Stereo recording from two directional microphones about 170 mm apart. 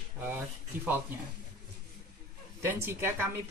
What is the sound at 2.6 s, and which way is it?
Speech, 15° right (ahead or behind).